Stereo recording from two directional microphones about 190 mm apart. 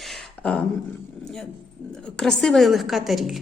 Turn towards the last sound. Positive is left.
turn(degrees=0)  # may be behind; listen again after turning